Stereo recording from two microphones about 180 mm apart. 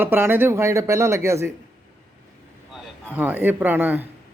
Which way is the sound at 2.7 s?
10° right (ahead or behind).